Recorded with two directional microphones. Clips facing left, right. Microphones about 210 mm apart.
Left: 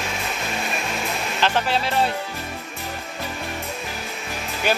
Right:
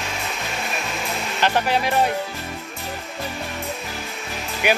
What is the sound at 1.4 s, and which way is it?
Speech, 15° right (ahead or behind).